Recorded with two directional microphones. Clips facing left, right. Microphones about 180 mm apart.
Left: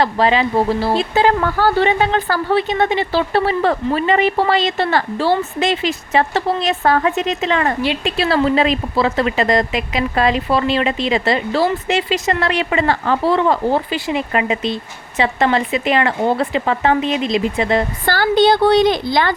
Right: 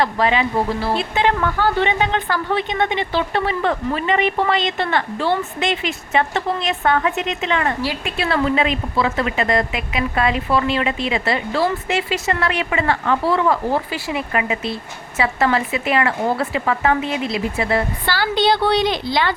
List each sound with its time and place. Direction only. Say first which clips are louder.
0.0 s a woman's voice: left 3 dB; 30° left (ahead or behind)
18.0 s a woman's voice: left 5 dB; 50° left (ahead or behind)